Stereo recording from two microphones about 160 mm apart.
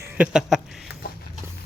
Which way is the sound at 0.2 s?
5° right (ahead or behind).